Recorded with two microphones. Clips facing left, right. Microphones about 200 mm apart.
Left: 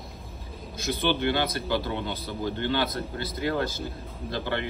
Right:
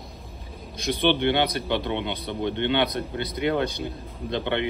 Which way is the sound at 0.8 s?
20° right (ahead or behind).